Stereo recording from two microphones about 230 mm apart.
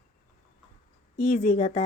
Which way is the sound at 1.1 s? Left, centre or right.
Left.